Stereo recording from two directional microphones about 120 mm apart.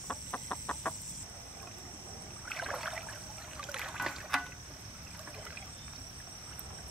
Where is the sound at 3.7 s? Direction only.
5° right (ahead or behind).